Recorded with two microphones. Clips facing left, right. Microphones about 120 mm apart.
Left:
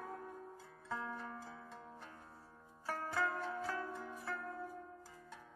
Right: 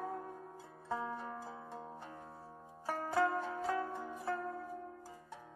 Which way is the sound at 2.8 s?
25° right (ahead or behind).